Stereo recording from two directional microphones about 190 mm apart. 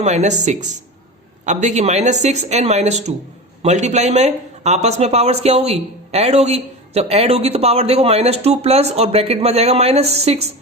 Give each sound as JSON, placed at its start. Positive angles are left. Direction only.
{"t": 0.0, "sound": "speech", "side_deg": -35}